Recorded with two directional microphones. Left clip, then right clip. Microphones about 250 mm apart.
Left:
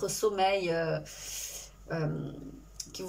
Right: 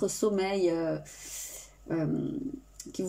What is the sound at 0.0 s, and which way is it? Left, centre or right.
Speech, right.